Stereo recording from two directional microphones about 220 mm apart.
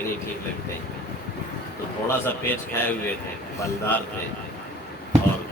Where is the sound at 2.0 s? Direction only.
10° left (ahead or behind).